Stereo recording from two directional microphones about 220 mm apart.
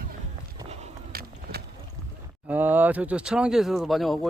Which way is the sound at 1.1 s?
45° right (ahead or behind).